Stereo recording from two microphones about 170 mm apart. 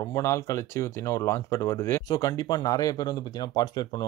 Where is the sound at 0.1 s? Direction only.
15° left (ahead or behind).